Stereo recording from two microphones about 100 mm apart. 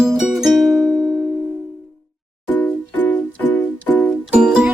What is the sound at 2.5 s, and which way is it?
Music, 20° left (ahead or behind).